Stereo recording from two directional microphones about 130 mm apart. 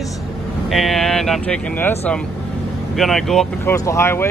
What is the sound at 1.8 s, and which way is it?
Speech, 15° left (ahead or behind).